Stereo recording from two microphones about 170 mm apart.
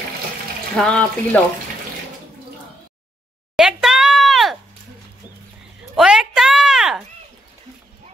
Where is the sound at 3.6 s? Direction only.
5° right (ahead or behind).